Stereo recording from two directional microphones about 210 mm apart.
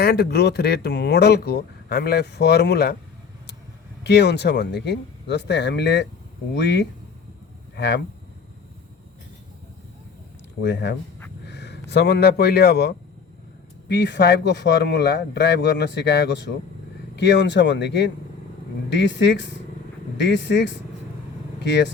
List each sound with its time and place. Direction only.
0.0 s speech: 50° left (ahead or behind)
4.0 s a man's voice: 55° left (ahead or behind)
10.6 s a man's voice: 55° left (ahead or behind)